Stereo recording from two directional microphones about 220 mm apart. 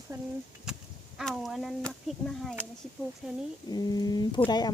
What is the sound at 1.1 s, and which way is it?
Speech, centre (ahead or behind).